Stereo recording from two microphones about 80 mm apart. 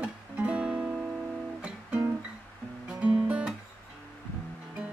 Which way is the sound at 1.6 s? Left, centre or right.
Centre.